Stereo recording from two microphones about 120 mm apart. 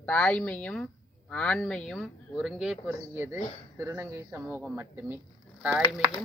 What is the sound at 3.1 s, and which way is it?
Speech, 20° right (ahead or behind).